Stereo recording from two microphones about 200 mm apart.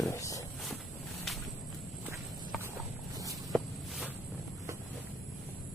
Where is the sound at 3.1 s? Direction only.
15° right (ahead or behind).